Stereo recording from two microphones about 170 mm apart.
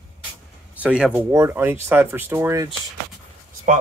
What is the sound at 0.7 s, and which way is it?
Speech, 5° right (ahead or behind).